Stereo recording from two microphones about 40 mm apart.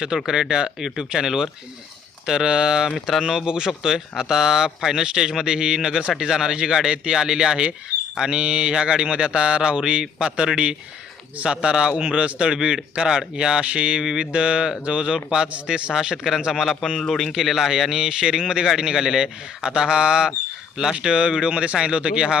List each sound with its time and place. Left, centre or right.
0.3 s a man's voice: centre
3.1 s a man's voice: centre
3.4 s a man's voice: centre
3.7 s a man's voice: centre; by 14.0 s right
14.0 s speech: centre
16.5 s a man's voice: centre; by 22.4 s right